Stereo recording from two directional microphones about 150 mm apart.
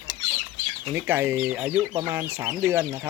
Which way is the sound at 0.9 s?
15° right (ahead or behind).